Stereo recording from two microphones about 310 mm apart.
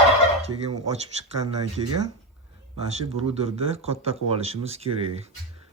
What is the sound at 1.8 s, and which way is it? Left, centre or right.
Speech, right.